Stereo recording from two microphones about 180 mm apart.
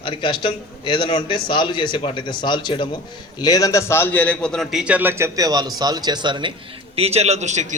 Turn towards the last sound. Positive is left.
turn(degrees=-40)  # may be behind; listen again after turning